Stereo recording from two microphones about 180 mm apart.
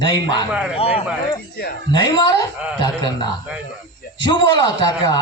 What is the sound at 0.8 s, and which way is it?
A man's voice, 30° left (ahead or behind).